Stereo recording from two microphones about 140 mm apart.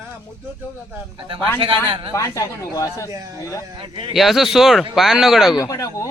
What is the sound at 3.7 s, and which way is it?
Speech, 40° right (ahead or behind).